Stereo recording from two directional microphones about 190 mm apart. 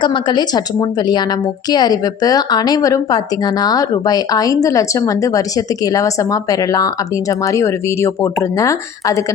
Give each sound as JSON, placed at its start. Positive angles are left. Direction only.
{"t": 0.0, "sound": "a woman's voice", "side_deg": 25}